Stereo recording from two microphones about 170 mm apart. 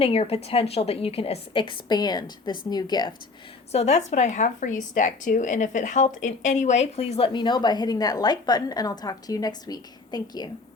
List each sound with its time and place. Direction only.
0.0 s a woman's voice: 35° left (ahead or behind)
3.7 s a woman's voice: 40° left (ahead or behind)